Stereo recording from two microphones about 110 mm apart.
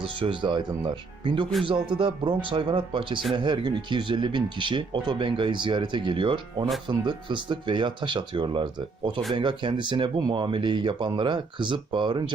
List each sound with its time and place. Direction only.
0.2 s speech: 50° right (ahead or behind)